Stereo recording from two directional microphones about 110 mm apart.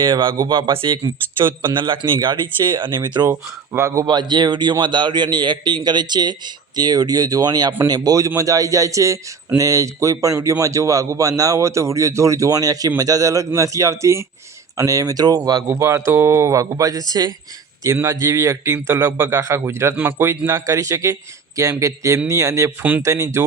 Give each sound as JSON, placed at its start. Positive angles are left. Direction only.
{"t": 0.0, "sound": "speech", "side_deg": -45}
{"t": 3.7, "sound": "speech", "side_deg": -25}
{"t": 4.0, "sound": "a man's voice", "side_deg": -40}
{"t": 15.8, "sound": "speech", "side_deg": -25}
{"t": 22.8, "sound": "speech", "side_deg": -15}
{"t": 23.0, "sound": "speech", "side_deg": -30}